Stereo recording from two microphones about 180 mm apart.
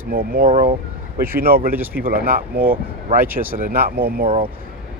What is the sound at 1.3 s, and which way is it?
Speech, 55° right (ahead or behind).